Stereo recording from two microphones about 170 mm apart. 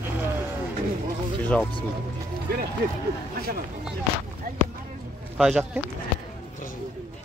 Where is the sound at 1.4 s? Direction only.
10° left (ahead or behind).